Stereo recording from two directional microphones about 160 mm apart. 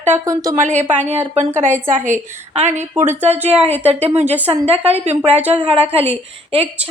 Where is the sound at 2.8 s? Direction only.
15° right (ahead or behind).